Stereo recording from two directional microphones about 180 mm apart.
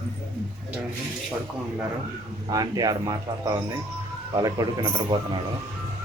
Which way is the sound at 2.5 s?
20° right (ahead or behind).